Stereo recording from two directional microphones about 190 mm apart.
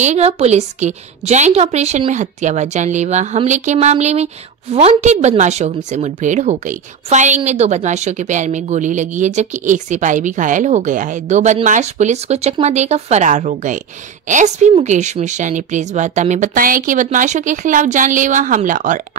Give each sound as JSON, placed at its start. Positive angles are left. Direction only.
{"t": 0.0, "sound": "a woman's voice", "side_deg": -35}